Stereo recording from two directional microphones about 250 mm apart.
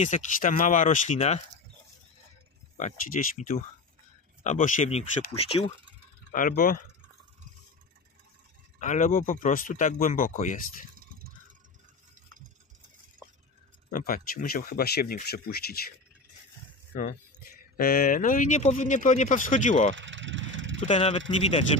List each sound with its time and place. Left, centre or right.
0.0 s speech: left
2.8 s speech: left
6.3 s speech: left
8.7 s speech: left
11.0 s a sound: right
13.8 s speech: left
16.9 s speech: left
20.0 s vehicle: right
20.8 s speech: left